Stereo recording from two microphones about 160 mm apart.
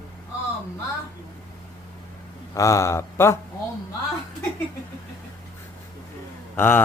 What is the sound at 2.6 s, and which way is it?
Mantra, 20° left (ahead or behind).